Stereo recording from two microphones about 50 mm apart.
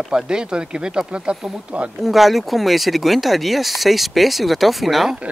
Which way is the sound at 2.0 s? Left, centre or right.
Centre.